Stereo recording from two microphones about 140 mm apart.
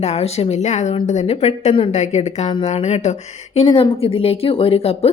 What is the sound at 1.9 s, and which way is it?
Speech, 55° left (ahead or behind).